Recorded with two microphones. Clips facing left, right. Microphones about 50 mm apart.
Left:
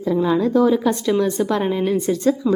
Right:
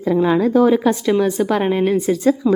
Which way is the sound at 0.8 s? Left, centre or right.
Right.